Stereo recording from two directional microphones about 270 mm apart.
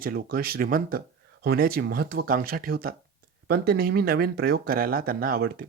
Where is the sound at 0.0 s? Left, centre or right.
Right.